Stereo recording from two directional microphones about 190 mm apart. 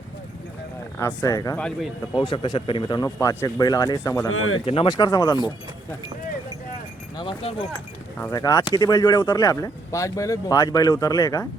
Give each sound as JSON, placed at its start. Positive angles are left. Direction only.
{"t": 0.9, "sound": "speech", "side_deg": 15}
{"t": 1.5, "sound": "speech", "side_deg": 5}
{"t": 2.1, "sound": "speech", "side_deg": 25}
{"t": 4.3, "sound": "speech", "side_deg": 90}
{"t": 4.6, "sound": "speech", "side_deg": 30}
{"t": 7.2, "sound": "speech", "side_deg": 25}